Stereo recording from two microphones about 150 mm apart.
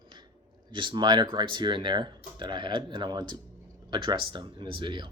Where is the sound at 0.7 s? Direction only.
35° right (ahead or behind).